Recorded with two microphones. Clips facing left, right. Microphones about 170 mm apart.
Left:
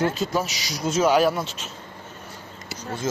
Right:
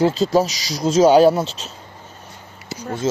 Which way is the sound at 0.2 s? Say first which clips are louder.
Right 8 dB; 35° right (ahead or behind).